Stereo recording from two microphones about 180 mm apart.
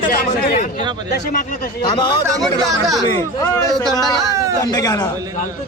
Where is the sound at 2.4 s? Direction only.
Centre (ahead or behind).